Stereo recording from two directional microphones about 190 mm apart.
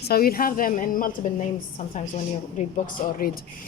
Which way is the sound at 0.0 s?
50° left (ahead or behind).